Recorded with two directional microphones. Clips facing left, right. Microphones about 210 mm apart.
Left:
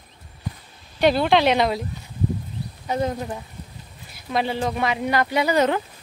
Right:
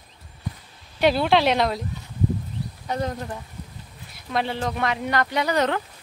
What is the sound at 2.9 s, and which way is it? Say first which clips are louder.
Speech: left 3 dB; 5° left (ahead or behind).